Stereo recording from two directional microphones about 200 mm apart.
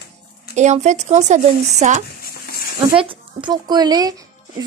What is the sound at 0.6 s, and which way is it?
Speech, 35° right (ahead or behind).